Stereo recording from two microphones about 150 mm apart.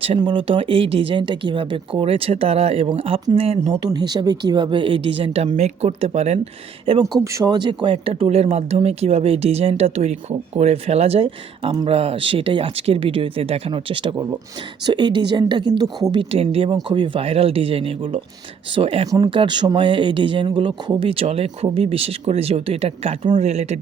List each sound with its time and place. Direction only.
0.0 s speech: 35° right (ahead or behind)
3.8 s speech: 25° right (ahead or behind)
7.3 s speech: 30° right (ahead or behind)
16.3 s speech: 40° right (ahead or behind)